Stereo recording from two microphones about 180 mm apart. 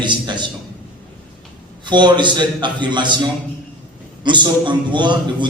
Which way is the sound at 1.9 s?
25° right (ahead or behind).